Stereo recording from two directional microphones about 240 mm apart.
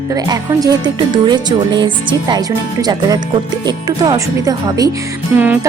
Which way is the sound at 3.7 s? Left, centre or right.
Centre.